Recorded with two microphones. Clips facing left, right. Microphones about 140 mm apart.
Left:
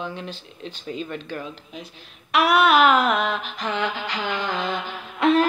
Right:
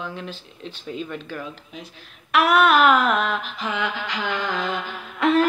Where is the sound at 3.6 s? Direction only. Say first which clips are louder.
Left 1 dB; 35° left (ahead or behind).